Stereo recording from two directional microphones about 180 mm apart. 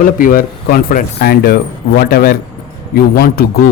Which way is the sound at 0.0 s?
50° left (ahead or behind).